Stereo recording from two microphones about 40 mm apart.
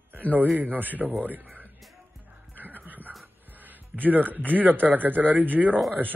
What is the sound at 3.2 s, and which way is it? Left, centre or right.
Music, right.